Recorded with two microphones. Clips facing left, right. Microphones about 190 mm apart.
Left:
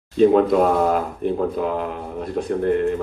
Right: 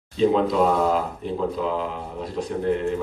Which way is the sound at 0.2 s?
55° left (ahead or behind).